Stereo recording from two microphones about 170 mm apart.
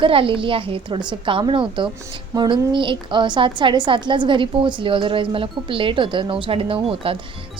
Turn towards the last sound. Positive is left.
turn(degrees=-35)  # may be behind; listen again after turning